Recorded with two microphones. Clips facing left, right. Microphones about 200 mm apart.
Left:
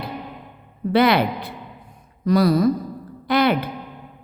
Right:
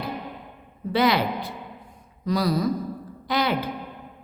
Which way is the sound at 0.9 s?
60° left (ahead or behind).